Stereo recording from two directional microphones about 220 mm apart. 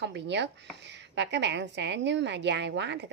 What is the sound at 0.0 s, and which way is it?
Speech, 50° right (ahead or behind).